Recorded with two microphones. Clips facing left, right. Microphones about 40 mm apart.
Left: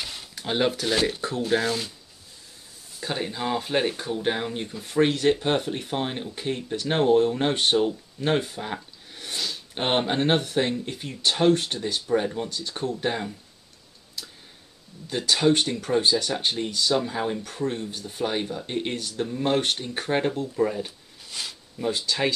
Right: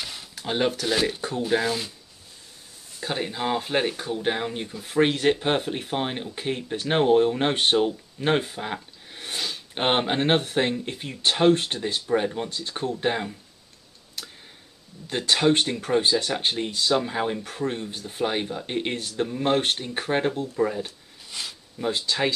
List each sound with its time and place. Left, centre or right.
0.0 s a sound: centre
0.8 s speech: centre
3.0 s speech: centre
4.8 s speech: centre
14.2 s tick-tock: right
15.0 s speech: right
18.9 s speech: right
19.2 s speech: centre
19.8 s speech: centre
20.1 s speech: centre
21.8 s speech: right